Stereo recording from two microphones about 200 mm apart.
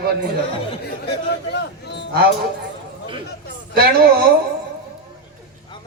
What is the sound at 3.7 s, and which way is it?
Speech, 45° right (ahead or behind).